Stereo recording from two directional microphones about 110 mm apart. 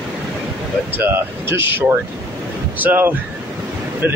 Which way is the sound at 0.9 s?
20° right (ahead or behind).